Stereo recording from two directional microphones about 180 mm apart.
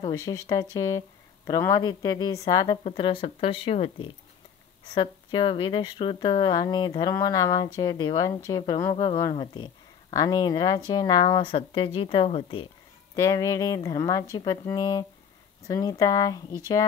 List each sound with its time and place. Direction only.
0.1 s speech: 15° left (ahead or behind)
13.1 s speech: 20° left (ahead or behind)